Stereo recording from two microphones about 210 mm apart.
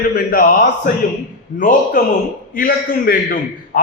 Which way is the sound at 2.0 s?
40° left (ahead or behind).